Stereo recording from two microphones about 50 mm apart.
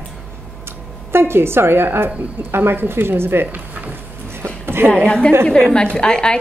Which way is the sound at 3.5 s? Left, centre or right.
Right.